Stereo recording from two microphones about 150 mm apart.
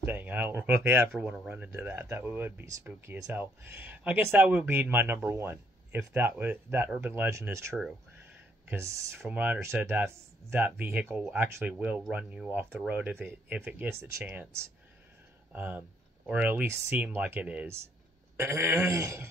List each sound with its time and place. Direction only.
0.0 s speech: 15° right (ahead or behind)